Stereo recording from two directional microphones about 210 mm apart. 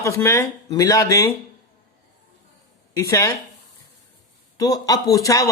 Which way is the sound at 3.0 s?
15° left (ahead or behind).